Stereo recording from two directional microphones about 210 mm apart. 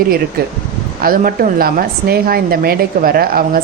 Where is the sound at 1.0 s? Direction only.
45° right (ahead or behind).